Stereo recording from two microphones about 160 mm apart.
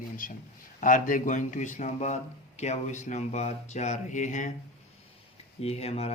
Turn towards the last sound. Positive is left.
turn(degrees=40)  # may be behind; listen again after turning